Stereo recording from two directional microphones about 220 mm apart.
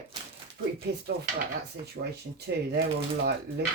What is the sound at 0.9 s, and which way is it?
Speech, 45° right (ahead or behind).